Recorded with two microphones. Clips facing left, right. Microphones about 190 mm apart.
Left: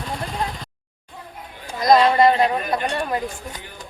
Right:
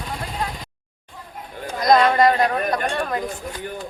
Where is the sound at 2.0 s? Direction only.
25° left (ahead or behind).